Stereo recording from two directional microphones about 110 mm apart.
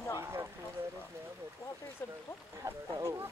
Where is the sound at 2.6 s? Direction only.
30° right (ahead or behind).